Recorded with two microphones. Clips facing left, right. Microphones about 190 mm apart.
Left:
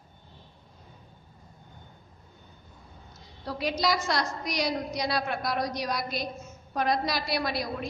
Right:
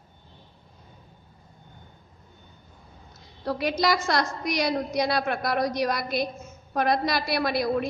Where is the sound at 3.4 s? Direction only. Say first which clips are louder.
Right 4 dB; 55° right (ahead or behind).